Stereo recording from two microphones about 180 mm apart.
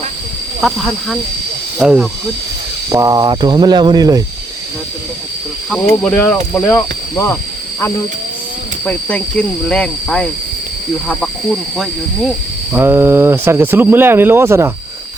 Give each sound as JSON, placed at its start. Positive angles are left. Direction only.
{"t": 0.6, "sound": "cricket", "side_deg": 0}
{"t": 2.9, "sound": "speech", "side_deg": -20}
{"t": 5.8, "sound": "speech", "side_deg": 10}
{"t": 8.8, "sound": "cricket", "side_deg": 5}
{"t": 12.7, "sound": "speech", "side_deg": -10}